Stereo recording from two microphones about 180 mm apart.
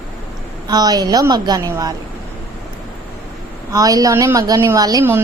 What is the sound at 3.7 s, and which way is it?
Speech, 20° right (ahead or behind).